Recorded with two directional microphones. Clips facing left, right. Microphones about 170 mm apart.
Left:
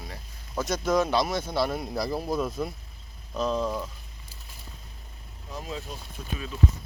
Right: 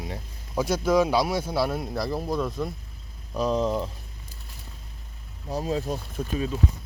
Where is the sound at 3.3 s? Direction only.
15° right (ahead or behind).